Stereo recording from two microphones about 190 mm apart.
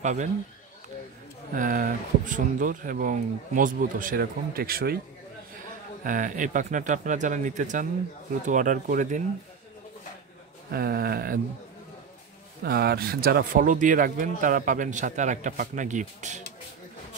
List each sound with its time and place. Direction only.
0.0 s speech: 40° right (ahead or behind)
1.5 s speech: 45° right (ahead or behind)
6.0 s speech: 45° right (ahead or behind)
10.7 s speech: 55° right (ahead or behind)
12.6 s speech: 55° right (ahead or behind); by 16.4 s 40° right (ahead or behind)